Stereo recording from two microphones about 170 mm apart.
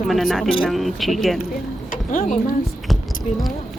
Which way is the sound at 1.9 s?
50° left (ahead or behind).